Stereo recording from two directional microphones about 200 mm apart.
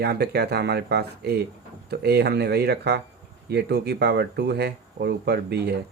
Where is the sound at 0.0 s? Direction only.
55° right (ahead or behind).